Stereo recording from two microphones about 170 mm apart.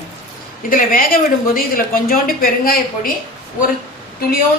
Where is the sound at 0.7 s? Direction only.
55° left (ahead or behind).